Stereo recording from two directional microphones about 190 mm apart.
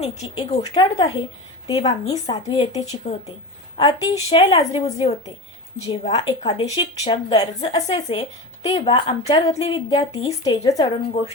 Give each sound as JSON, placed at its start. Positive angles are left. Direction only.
{"t": 0.2, "sound": "speech", "side_deg": 35}
{"t": 3.8, "sound": "speech", "side_deg": 20}
{"t": 10.4, "sound": "speech", "side_deg": 20}